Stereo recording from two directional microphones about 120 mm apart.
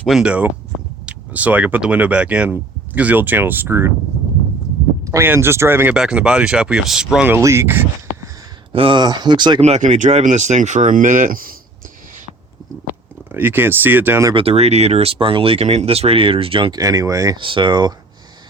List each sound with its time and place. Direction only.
0.1 s speech: 10° right (ahead or behind)
5.0 s speech: 20° right (ahead or behind)
5.9 s speech: 5° right (ahead or behind)
7.3 s speech: 20° right (ahead or behind)
8.7 s speech: 45° right (ahead or behind)
9.6 s speech: 65° right (ahead or behind); by 11.3 s 90° right
13.3 s speech: 15° right (ahead or behind)
14.3 s speech: 55° right (ahead or behind)
16.7 s speech: 30° right (ahead or behind)
17.3 s speech: 40° right (ahead or behind)